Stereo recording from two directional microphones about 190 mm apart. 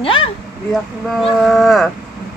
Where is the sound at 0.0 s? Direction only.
30° left (ahead or behind).